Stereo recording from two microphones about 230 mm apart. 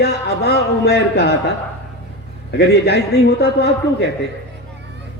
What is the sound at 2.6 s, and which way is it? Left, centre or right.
A man's voice, left.